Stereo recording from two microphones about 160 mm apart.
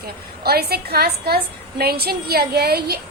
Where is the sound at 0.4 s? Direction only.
75° right (ahead or behind).